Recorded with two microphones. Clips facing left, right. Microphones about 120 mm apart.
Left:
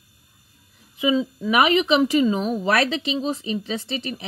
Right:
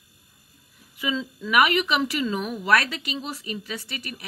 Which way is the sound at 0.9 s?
20° left (ahead or behind).